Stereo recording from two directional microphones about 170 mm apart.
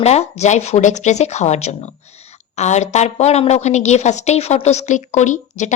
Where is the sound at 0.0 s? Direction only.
40° left (ahead or behind).